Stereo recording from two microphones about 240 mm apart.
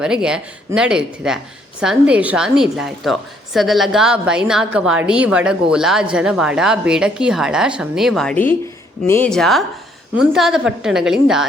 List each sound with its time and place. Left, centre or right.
0.0 s a woman's voice: centre